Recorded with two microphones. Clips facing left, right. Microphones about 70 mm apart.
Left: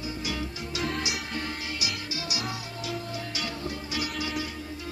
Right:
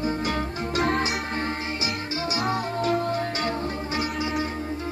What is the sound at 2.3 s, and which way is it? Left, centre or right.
Music, right.